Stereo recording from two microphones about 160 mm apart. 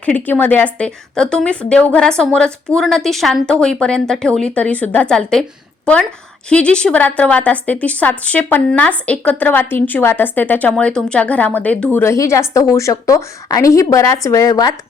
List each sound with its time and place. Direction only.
0.0 s a woman's voice: 10° left (ahead or behind)